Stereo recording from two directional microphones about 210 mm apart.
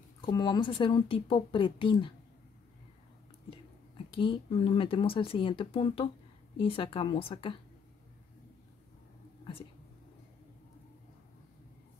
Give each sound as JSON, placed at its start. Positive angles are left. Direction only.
{"t": 0.2, "sound": "a woman's voice", "side_deg": 20}
{"t": 4.1, "sound": "a woman's voice", "side_deg": 25}